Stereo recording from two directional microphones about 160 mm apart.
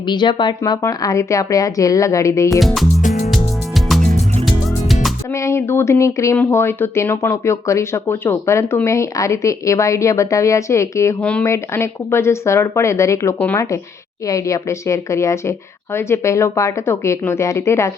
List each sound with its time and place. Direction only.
0.1 s speech: 30° left (ahead or behind)
2.6 s music: centre (ahead or behind)
3.0 s music: 55° left (ahead or behind)
3.2 s music: centre (ahead or behind)
5.3 s speech: 20° left (ahead or behind)
11.2 s speech: 5° left (ahead or behind)